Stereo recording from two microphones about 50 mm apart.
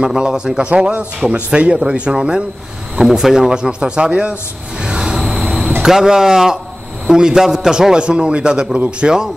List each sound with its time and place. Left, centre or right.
0.0 s a man's voice: centre
4.8 s train: centre
5.2 s a sound: centre
5.8 s speech: centre